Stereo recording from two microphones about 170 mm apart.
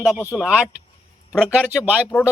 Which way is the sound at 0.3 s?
Centre (ahead or behind).